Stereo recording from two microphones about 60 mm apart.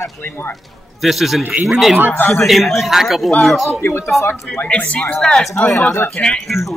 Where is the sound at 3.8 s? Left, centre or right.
Left.